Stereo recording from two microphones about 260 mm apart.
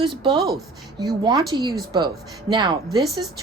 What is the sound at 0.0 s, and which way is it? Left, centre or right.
Speech, centre.